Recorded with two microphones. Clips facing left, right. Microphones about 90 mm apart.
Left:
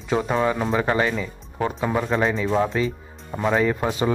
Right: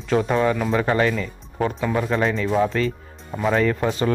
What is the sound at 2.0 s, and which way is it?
Speech, 5° left (ahead or behind).